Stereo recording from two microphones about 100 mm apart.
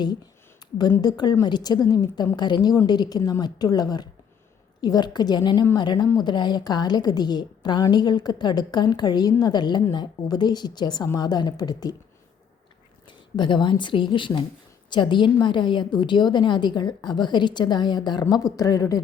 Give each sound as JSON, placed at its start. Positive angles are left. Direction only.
{"t": 1.0, "sound": "a woman's voice", "side_deg": 45}
{"t": 13.1, "sound": "a woman's voice", "side_deg": 50}